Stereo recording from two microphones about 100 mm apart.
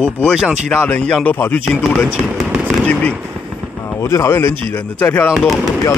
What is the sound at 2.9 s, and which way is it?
Speech, 15° left (ahead or behind).